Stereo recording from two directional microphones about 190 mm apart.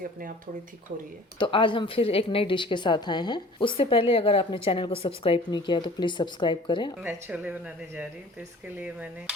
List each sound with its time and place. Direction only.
0.0 s speech: 45° right (ahead or behind)
1.4 s speech: 25° left (ahead or behind)
7.0 s a woman's voice: 10° right (ahead or behind)